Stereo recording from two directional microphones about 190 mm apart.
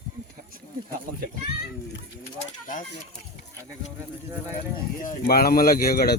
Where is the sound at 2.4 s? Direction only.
45° left (ahead or behind).